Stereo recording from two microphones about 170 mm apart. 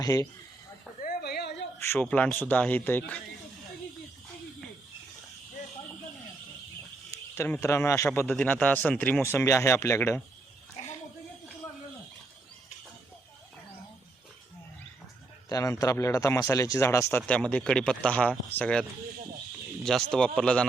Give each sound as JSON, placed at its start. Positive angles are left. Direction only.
{"t": 0.0, "sound": "a man's voice", "side_deg": 20}
{"t": 1.0, "sound": "a sound", "side_deg": 70}
{"t": 1.8, "sound": "speech", "side_deg": 10}
{"t": 7.3, "sound": "speech", "side_deg": 15}
{"t": 10.8, "sound": "a sound", "side_deg": 40}
{"t": 15.4, "sound": "a man's voice", "side_deg": 20}